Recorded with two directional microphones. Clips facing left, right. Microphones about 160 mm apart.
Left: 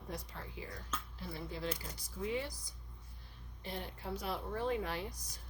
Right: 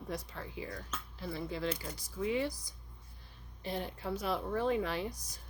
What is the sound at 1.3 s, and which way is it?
A woman's voice, 90° right.